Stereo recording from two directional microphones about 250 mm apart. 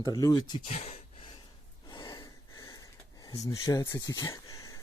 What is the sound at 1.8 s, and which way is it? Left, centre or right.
Gasp, centre.